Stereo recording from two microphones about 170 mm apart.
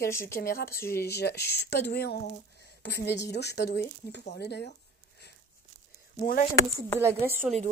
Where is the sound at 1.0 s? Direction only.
75° left (ahead or behind).